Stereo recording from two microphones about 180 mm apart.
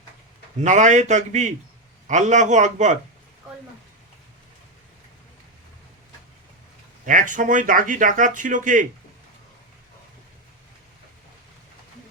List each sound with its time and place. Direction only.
0.6 s speech: 40° right (ahead or behind)
7.0 s speech: 45° right (ahead or behind)